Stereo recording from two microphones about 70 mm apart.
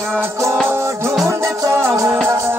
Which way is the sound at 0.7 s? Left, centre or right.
Right.